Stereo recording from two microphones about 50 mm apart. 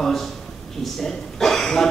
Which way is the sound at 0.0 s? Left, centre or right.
Centre.